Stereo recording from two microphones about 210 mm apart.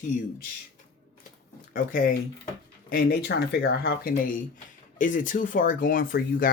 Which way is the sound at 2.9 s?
45° left (ahead or behind).